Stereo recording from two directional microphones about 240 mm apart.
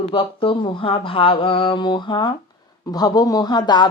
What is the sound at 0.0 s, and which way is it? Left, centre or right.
Speech, left.